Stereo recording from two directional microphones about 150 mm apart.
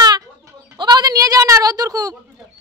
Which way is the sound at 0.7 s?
25° right (ahead or behind).